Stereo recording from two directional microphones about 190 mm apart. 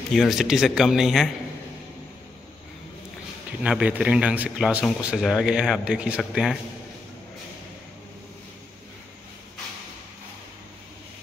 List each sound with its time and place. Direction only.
0.1 s speech: centre (ahead or behind)
3.6 s speech: 5° right (ahead or behind)